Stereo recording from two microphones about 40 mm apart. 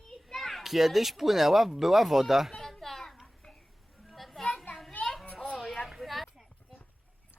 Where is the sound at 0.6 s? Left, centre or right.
Centre.